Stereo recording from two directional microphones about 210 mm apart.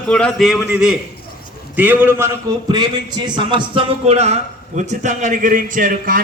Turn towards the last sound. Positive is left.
turn(degrees=-40)  # may be behind; listen again after turning